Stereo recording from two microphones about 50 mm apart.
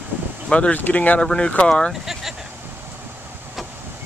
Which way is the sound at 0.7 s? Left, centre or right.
Left.